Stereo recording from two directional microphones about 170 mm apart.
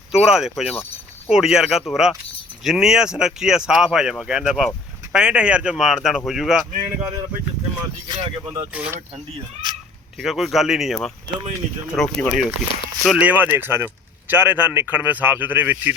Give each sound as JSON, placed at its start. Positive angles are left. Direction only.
{"t": 0.1, "sound": "speech", "side_deg": -5}
{"t": 8.0, "sound": "speech", "side_deg": -25}
{"t": 8.7, "sound": "speech", "side_deg": -10}
{"t": 10.2, "sound": "speech", "side_deg": 0}